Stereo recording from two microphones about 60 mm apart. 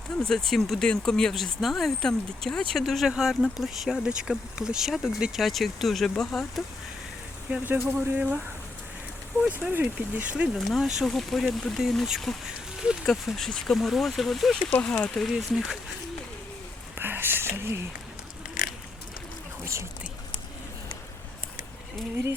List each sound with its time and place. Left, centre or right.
0.2 s speech: centre
7.6 s speech: right
9.5 s speech: right
10.3 s speech: centre
10.7 s speech: centre
11.1 s speech: centre
12.5 s a sound: centre
13.1 s speech: centre
13.7 s speech: centre
14.7 s speech: centre
15.1 s speech: centre
17.0 s speech: right
19.6 s speech: right